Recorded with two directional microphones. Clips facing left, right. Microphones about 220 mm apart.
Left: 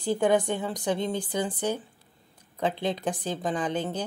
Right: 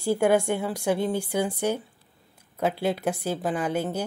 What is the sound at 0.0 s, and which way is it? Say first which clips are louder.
A woman's voice: right 2 dB; 10° right (ahead or behind).